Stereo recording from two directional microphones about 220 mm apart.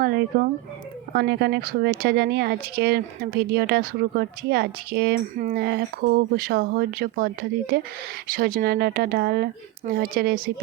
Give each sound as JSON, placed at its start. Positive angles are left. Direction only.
{"t": 0.0, "sound": "speech", "side_deg": -45}